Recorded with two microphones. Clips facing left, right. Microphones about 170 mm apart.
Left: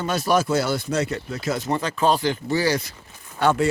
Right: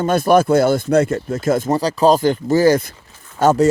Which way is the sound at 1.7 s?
35° right (ahead or behind).